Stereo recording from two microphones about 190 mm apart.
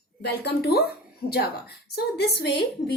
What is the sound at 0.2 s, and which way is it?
Speech, 60° left (ahead or behind).